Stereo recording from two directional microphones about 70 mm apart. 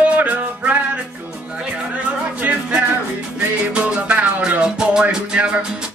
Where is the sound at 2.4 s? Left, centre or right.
Centre.